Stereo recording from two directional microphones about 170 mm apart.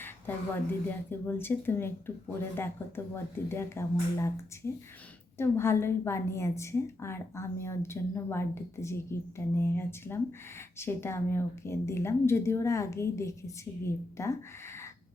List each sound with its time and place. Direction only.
0.3 s a woman's voice: 10° left (ahead or behind)